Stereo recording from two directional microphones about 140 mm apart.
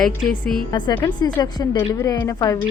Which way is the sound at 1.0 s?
30° left (ahead or behind).